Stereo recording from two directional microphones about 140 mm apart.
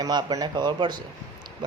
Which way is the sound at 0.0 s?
30° right (ahead or behind).